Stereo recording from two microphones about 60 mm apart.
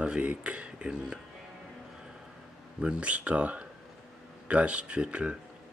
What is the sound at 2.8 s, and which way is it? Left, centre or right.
Speech, centre.